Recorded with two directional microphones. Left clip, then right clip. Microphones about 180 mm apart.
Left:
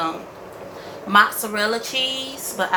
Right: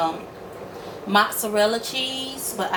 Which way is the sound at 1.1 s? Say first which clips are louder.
Left 3 dB; 25° right (ahead or behind).